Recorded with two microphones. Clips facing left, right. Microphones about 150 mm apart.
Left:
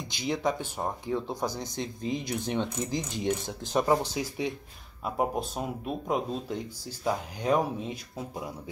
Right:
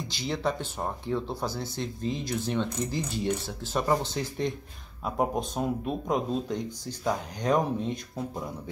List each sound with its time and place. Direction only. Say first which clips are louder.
0.1 s speech: left 2 dB; 10° left (ahead or behind)